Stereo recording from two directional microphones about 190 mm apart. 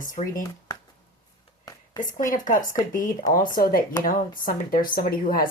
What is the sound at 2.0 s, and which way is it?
Speech, 45° left (ahead or behind).